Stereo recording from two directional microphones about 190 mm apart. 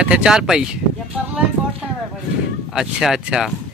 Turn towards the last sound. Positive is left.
turn(degrees=0)  # may be behind; listen again after turning